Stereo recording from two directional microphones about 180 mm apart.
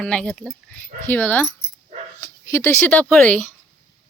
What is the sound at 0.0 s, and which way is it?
Speech, 5° left (ahead or behind).